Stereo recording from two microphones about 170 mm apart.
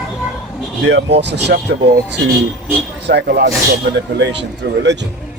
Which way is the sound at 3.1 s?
75° right (ahead or behind).